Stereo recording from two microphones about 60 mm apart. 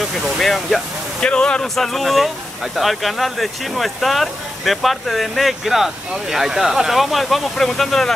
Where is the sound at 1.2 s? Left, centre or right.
Centre.